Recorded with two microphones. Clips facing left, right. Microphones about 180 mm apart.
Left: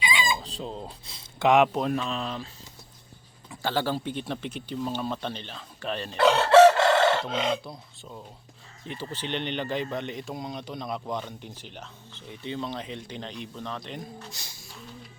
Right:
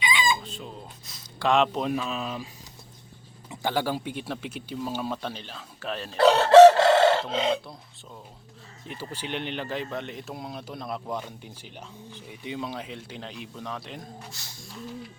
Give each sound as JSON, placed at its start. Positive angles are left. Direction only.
{"t": 0.0, "sound": "chicken", "side_deg": 35}
{"t": 1.8, "sound": "speech", "side_deg": -5}
{"t": 3.5, "sound": "speech", "side_deg": -15}
{"t": 6.1, "sound": "chicken", "side_deg": -35}
{"t": 7.5, "sound": "speech", "side_deg": 0}
{"t": 14.3, "sound": "a sound", "side_deg": 15}